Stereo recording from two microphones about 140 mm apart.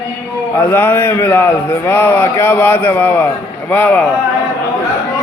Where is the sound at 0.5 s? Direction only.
15° left (ahead or behind).